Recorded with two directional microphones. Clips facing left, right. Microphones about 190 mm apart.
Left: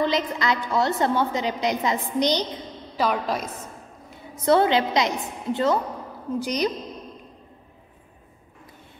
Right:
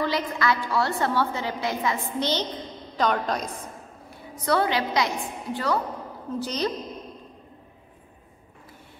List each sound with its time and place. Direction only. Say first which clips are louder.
0.0 s a woman's voice: left 2 dB; 20° left (ahead or behind); by 3.4 s 5° left (ahead or behind)
4.1 s a woman's voice: left 5 dB; 25° left (ahead or behind)